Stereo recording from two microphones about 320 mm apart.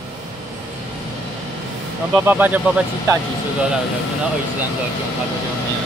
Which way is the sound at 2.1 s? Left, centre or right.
Centre.